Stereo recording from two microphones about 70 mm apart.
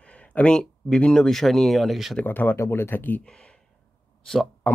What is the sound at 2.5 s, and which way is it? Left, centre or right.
Speech, left.